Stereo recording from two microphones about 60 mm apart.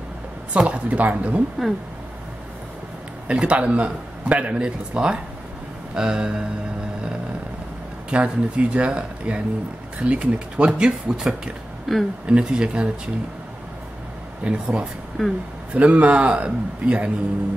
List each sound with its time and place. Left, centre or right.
0.5 s a man's voice: right
3.3 s a man's voice: centre
8.1 s a man's voice: centre
11.9 s speech: centre
12.3 s speech: centre
14.4 s speech: centre
15.2 s speech: centre
15.7 s a man's voice: right